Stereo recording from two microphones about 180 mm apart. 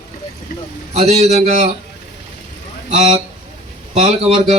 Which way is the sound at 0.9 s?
40° right (ahead or behind).